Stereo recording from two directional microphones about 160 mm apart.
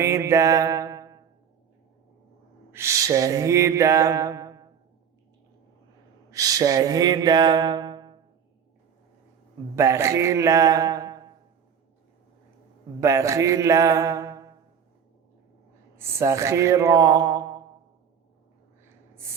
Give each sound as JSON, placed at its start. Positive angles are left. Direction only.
{"t": 0.0, "sound": "mantra", "side_deg": -15}
{"t": 2.7, "sound": "mantra", "side_deg": -20}
{"t": 6.3, "sound": "mantra", "side_deg": -20}
{"t": 9.7, "sound": "mantra", "side_deg": -15}
{"t": 13.0, "sound": "mantra", "side_deg": -20}
{"t": 16.0, "sound": "a sound", "side_deg": -15}